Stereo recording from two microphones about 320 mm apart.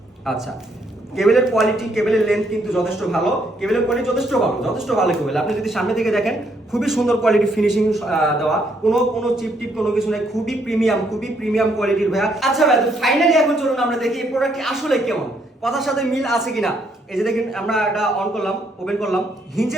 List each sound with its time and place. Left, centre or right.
1.1 s a man's voice: centre